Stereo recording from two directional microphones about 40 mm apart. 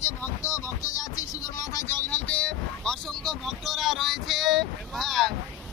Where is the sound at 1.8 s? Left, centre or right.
Left.